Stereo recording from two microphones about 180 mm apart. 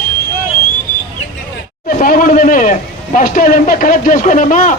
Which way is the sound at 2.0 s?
50° left (ahead or behind).